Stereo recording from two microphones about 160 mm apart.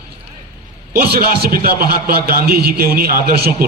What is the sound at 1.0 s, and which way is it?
A man's voice, 70° right (ahead or behind).